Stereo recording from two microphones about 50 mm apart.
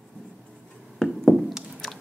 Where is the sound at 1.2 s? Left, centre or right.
Centre.